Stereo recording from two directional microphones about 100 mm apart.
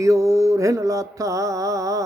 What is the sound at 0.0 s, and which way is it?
Speech, 30° right (ahead or behind).